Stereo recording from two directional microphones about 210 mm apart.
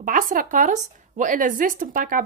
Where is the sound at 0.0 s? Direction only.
40° right (ahead or behind).